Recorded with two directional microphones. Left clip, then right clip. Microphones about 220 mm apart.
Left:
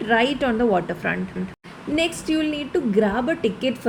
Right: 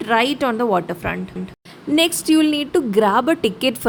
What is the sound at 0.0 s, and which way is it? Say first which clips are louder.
A woman's voice: right 2 dB; 20° right (ahead or behind).